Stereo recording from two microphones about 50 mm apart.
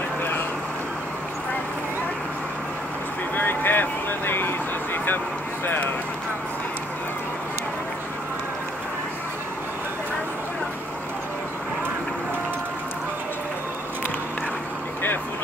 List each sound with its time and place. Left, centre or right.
3.3 s vehicle: left